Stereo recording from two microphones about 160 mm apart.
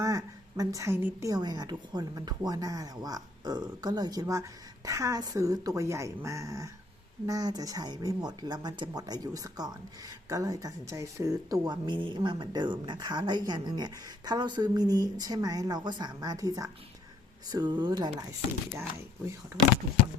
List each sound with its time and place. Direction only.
0.0 s speech: 20° right (ahead or behind)
19.5 s speech: 20° right (ahead or behind)